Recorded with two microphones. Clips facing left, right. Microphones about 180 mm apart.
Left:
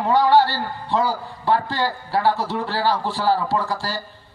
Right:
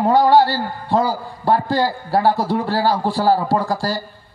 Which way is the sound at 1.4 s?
40° right (ahead or behind).